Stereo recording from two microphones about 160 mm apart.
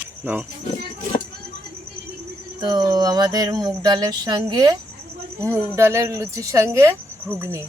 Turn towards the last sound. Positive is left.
turn(degrees=-15)  # may be behind; listen again after turning